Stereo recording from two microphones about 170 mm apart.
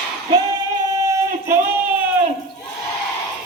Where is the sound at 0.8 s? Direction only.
15° right (ahead or behind).